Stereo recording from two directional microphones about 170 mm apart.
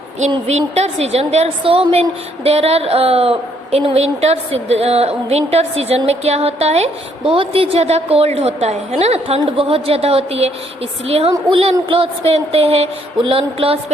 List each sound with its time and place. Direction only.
0.4 s speech: 40° right (ahead or behind)